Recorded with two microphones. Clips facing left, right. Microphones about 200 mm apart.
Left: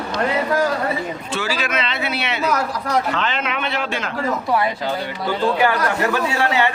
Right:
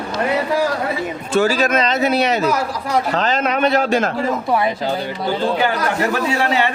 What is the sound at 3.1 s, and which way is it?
Speech, 40° right (ahead or behind).